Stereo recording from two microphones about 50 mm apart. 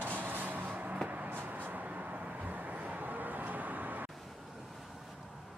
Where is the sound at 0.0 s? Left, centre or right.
Right.